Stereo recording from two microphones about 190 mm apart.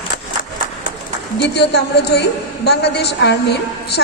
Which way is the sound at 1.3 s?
60° left (ahead or behind).